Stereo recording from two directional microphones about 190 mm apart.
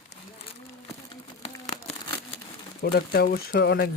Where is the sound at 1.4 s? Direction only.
35° left (ahead or behind).